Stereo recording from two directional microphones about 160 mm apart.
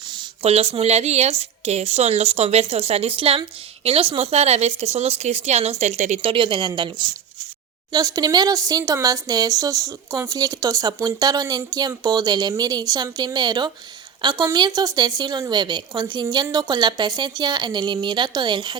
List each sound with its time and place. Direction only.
0.1 s speech: 35° right (ahead or behind)
6.3 s speech: 30° right (ahead or behind)